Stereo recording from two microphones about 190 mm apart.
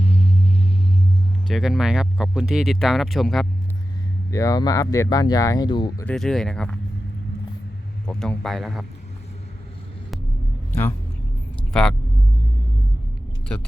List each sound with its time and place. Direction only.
0.0 s vehicle: 35° left (ahead or behind)
1.5 s speech: centre (ahead or behind)
4.3 s speech: 15° left (ahead or behind)
6.1 s speech: centre (ahead or behind)
8.0 s speech: 5° left (ahead or behind)
10.7 s speech: 10° left (ahead or behind)